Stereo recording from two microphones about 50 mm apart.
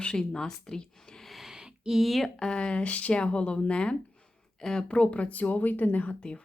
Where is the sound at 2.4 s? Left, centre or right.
Centre.